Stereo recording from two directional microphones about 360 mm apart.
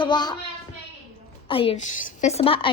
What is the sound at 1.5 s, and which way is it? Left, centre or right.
Child singing, centre.